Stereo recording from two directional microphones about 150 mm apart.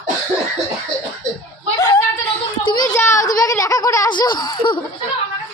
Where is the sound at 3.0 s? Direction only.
15° left (ahead or behind).